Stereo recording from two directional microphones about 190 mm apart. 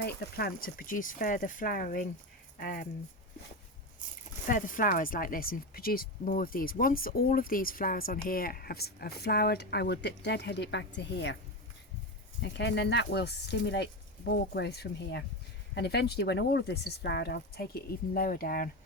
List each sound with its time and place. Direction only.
0.0 s speech: 55° left (ahead or behind)
4.4 s speech: 45° left (ahead or behind); by 11.3 s 65° left (ahead or behind)
12.4 s speech: 65° left (ahead or behind); by 18.7 s 50° left (ahead or behind)